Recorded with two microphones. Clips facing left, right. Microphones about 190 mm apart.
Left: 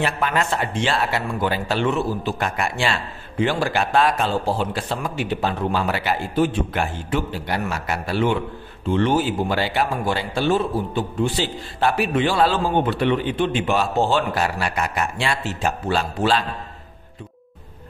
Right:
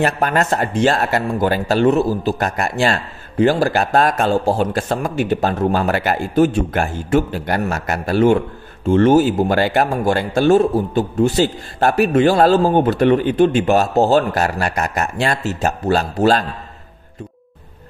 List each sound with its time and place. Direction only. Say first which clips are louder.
0.0 s speech: right 5 dB; 45° right (ahead or behind)